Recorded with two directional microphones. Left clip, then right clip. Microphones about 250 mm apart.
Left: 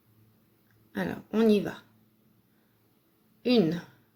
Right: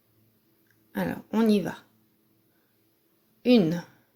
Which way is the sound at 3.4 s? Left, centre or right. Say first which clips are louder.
Right 3 dB; right.